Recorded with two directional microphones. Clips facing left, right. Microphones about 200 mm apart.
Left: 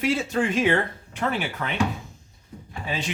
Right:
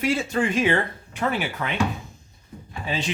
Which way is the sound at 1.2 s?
10° right (ahead or behind).